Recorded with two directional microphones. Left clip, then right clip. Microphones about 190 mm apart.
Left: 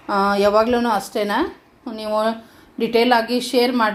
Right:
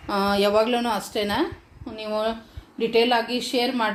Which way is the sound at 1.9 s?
30° left (ahead or behind).